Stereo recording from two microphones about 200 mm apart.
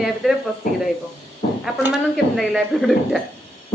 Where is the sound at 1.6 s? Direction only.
5° right (ahead or behind).